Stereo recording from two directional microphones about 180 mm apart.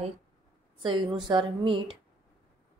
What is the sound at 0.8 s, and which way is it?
A woman's voice, 25° right (ahead or behind).